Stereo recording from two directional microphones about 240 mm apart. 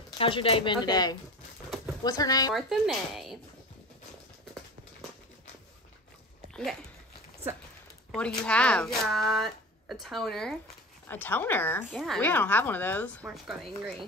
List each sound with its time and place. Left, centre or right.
0.2 s speech: left
2.5 s speech: centre
6.5 s speech: centre
8.1 s speech: centre